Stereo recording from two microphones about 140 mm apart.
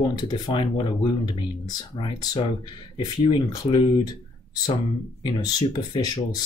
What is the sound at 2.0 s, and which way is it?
Speech, 30° left (ahead or behind).